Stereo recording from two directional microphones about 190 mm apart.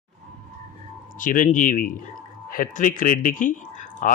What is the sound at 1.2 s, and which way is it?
Speech, 45° left (ahead or behind).